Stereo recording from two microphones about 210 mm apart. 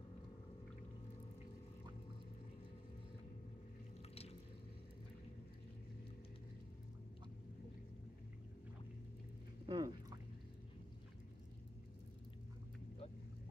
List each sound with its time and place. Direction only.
4.1 s drip: 30° left (ahead or behind)
9.7 s boat: 15° right (ahead or behind)